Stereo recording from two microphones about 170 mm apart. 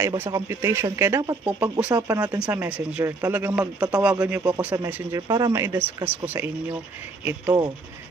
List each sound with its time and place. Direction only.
0.0 s speech: 20° right (ahead or behind)
2.0 s speech: 20° right (ahead or behind)
2.4 s speech: 10° right (ahead or behind)